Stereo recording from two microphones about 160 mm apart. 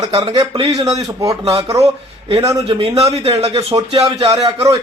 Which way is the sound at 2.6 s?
40° right (ahead or behind).